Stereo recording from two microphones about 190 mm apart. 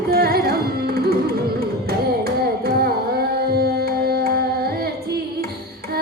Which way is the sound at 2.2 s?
55° right (ahead or behind).